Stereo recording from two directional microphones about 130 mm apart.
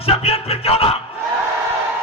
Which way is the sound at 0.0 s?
50° left (ahead or behind).